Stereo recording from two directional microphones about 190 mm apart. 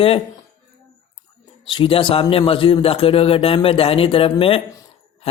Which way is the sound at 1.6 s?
25° left (ahead or behind).